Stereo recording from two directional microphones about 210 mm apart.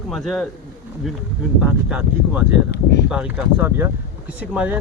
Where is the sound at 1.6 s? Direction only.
5° right (ahead or behind).